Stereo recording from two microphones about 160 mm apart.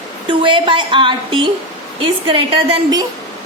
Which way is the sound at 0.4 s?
30° right (ahead or behind).